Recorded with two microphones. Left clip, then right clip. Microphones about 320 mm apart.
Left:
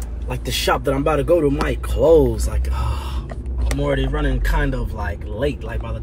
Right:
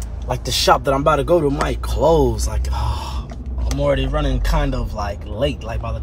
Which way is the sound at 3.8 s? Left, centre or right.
Right.